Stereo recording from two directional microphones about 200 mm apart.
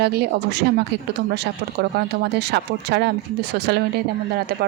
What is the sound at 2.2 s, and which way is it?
Speech, 55° right (ahead or behind).